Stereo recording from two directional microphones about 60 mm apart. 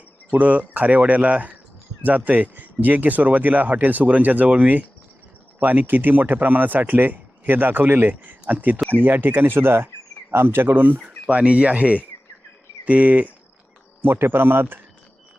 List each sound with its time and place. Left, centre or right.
0.3 s speech: right
14.0 s speech: right